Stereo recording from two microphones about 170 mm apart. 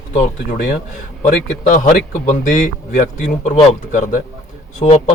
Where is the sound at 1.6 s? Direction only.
50° left (ahead or behind).